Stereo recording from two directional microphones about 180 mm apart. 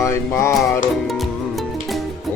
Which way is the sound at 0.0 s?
15° left (ahead or behind).